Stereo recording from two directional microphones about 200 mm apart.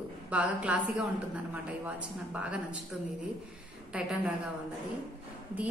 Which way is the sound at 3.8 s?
5° right (ahead or behind).